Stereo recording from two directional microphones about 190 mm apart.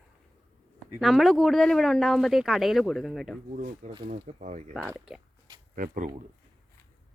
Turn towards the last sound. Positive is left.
turn(degrees=-45)  # may be behind; listen again after turning